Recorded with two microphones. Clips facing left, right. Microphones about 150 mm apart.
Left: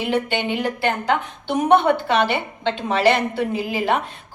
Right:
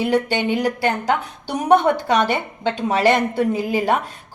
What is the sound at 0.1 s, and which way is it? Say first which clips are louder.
A woman's voice: right 3 dB; 40° right (ahead or behind).